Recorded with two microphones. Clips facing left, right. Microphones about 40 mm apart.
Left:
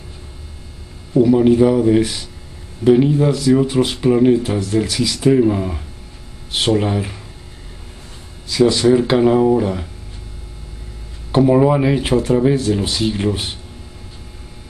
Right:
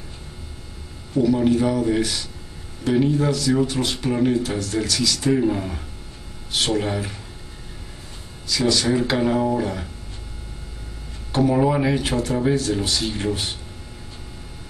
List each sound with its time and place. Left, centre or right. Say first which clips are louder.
1.1 s speech: left 6 dB; left
8.5 s speech: left 7 dB; left
11.3 s speech: left 6 dB; centre